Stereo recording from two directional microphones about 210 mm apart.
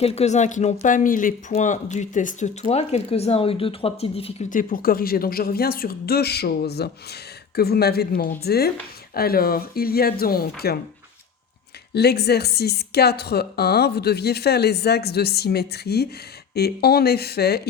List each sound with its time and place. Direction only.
0.0 s a woman's voice: 30° left (ahead or behind); by 10.8 s 45° left (ahead or behind)
11.9 s a woman's voice: 50° left (ahead or behind)